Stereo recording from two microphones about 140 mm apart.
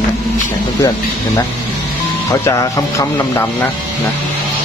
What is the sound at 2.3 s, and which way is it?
Speech, 20° left (ahead or behind).